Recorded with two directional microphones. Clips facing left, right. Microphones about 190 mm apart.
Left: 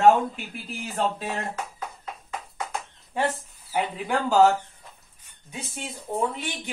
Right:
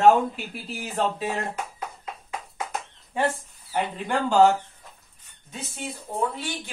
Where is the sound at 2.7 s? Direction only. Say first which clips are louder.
Even; centre (ahead or behind).